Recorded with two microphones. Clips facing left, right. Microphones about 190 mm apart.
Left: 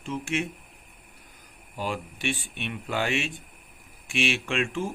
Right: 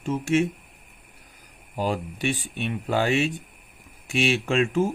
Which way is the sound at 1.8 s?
35° right (ahead or behind).